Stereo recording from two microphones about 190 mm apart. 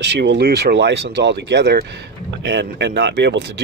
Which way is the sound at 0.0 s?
65° right (ahead or behind).